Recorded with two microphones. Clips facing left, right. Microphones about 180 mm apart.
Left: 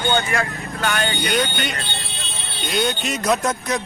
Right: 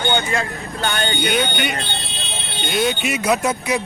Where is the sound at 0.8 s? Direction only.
30° right (ahead or behind).